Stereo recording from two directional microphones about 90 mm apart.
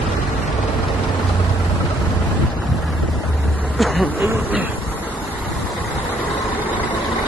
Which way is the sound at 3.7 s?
Centre (ahead or behind).